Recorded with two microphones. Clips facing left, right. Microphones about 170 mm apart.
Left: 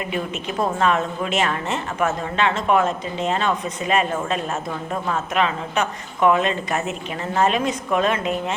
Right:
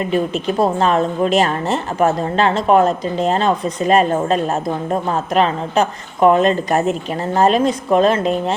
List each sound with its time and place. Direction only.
0.1 s a woman's voice: 35° right (ahead or behind)